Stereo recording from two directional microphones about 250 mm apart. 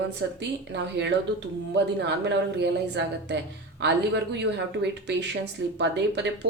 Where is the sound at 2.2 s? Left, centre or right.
Right.